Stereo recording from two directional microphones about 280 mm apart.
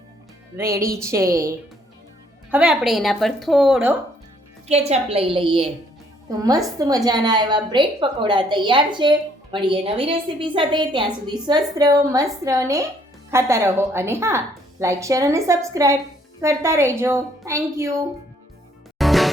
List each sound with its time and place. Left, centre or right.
0.5 s a woman's voice: centre
4.7 s a woman's voice: right
6.7 s a woman's voice: centre
18.9 s music: centre